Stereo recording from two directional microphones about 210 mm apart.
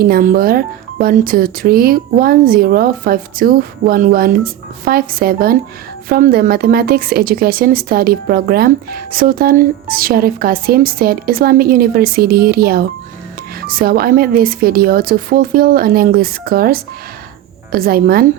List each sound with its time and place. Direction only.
0.0 s speech: 45° right (ahead or behind)